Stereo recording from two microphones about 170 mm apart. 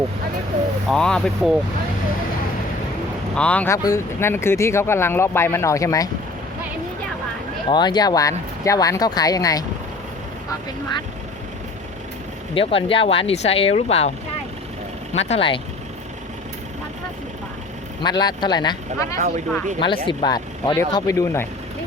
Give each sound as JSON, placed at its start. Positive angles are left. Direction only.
{"t": 0.9, "sound": "speech", "side_deg": 5}
{"t": 3.3, "sound": "speech", "side_deg": 5}
{"t": 7.7, "sound": "speech", "side_deg": 25}
{"t": 12.5, "sound": "speech", "side_deg": 30}
{"t": 15.1, "sound": "speech", "side_deg": 40}
{"t": 18.0, "sound": "speech", "side_deg": 25}